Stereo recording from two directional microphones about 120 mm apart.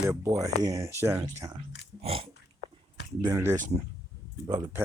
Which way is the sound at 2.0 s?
50° right (ahead or behind).